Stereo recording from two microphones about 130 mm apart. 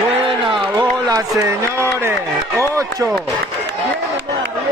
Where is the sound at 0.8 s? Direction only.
30° right (ahead or behind).